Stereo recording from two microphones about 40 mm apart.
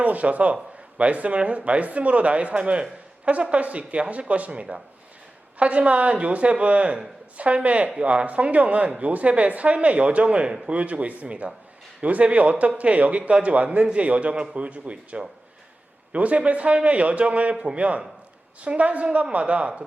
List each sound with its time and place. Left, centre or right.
0.0 s speech: right
10.2 s speech: right